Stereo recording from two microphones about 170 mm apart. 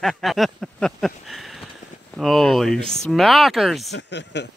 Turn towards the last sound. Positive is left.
turn(degrees=90)